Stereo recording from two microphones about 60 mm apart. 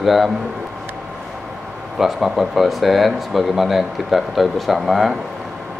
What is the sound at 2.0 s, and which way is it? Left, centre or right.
Speech, centre.